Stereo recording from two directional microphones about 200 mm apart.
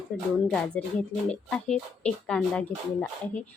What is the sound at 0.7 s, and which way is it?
Speech, 5° left (ahead or behind).